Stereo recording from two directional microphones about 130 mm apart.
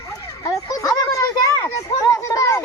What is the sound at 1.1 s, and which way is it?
Children playing, 25° left (ahead or behind).